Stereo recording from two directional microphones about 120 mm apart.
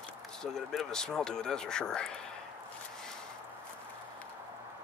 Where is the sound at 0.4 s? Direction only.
5° left (ahead or behind).